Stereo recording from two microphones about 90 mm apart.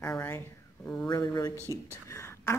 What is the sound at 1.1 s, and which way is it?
Speech, 45° left (ahead or behind).